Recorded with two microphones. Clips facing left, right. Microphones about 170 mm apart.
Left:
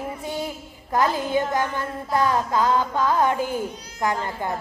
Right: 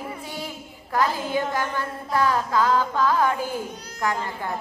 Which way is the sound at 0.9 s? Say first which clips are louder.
Left 2 dB; 20° left (ahead or behind).